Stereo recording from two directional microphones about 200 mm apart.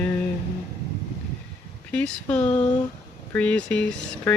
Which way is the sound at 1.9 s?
5° left (ahead or behind).